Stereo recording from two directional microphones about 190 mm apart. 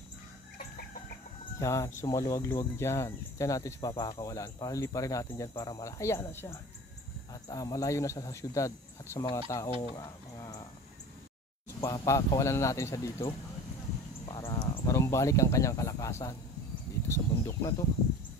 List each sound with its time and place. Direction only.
1.6 s speech: 15° left (ahead or behind)
9.9 s bird: 20° left (ahead or behind)
11.8 s speech: 15° left (ahead or behind)